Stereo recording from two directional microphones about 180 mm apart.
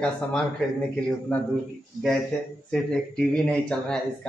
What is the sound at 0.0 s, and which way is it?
Speech, 5° left (ahead or behind).